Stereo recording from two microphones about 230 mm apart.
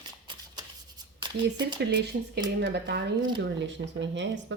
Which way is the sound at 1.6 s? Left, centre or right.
Right.